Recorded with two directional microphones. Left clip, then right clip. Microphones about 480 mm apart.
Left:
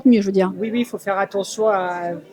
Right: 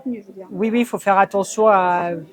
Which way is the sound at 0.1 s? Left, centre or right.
Left.